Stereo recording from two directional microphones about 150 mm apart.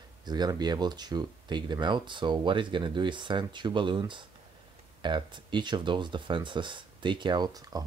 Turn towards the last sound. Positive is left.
turn(degrees=-25)  # may be behind; listen again after turning